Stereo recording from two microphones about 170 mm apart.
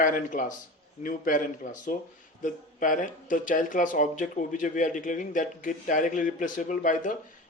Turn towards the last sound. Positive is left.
turn(degrees=50)  # may be behind; listen again after turning